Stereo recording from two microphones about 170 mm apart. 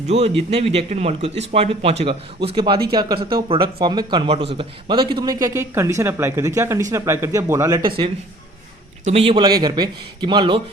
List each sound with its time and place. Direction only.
0.1 s speech: 35° right (ahead or behind)